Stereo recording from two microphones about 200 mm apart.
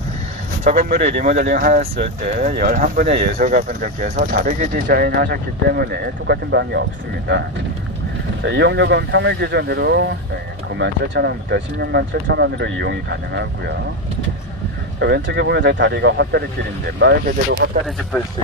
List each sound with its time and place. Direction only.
0.7 s speech: 45° right (ahead or behind)
8.4 s speech: 65° right (ahead or behind)
15.0 s speech: 60° right (ahead or behind)